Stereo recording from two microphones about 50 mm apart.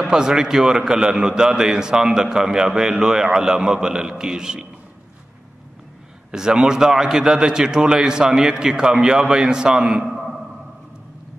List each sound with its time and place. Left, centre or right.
0.0 s a man's voice: centre
6.3 s a man's voice: centre
10.0 s a sound: centre